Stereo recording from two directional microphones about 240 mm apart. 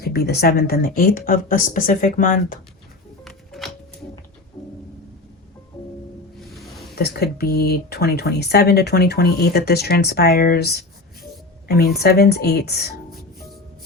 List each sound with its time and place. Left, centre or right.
0.0 s speech: left
3.2 s music: centre
6.9 s speech: left